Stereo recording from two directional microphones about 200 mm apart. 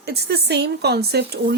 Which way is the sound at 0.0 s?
55° right (ahead or behind).